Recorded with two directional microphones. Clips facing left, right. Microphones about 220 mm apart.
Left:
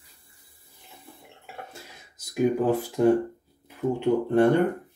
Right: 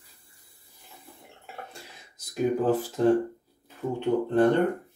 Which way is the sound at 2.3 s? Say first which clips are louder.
Left 2 dB; 15° left (ahead or behind).